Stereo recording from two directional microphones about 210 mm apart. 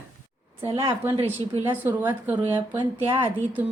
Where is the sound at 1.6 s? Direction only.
10° right (ahead or behind).